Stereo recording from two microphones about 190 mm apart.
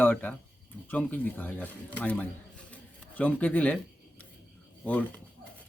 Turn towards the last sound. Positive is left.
turn(degrees=5)  # may be behind; listen again after turning